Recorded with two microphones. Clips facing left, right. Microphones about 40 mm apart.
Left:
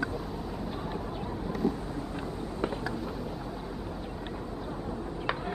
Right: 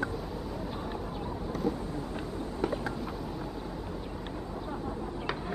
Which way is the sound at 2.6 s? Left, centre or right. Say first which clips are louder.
Right 1 dB; centre.